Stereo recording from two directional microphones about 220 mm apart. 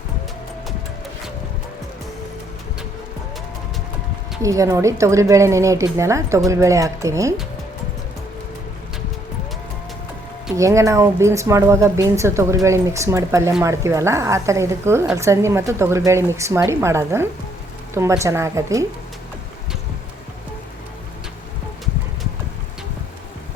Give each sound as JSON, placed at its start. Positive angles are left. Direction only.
{"t": 4.4, "sound": "a woman's voice", "side_deg": -15}
{"t": 10.6, "sound": "a woman's voice", "side_deg": -15}